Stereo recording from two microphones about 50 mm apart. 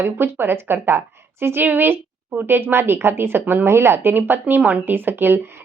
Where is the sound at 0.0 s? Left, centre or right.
Right.